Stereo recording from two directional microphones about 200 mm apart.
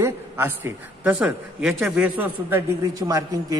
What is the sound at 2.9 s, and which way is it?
Speech, 20° right (ahead or behind).